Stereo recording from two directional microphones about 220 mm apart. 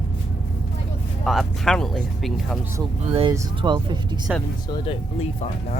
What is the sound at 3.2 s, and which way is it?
Speech, 20° right (ahead or behind).